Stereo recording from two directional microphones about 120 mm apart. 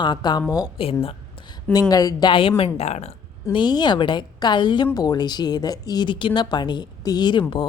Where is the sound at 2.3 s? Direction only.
50° left (ahead or behind).